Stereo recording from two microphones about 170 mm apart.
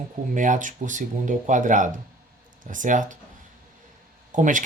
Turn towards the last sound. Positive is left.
turn(degrees=-50)  # may be behind; listen again after turning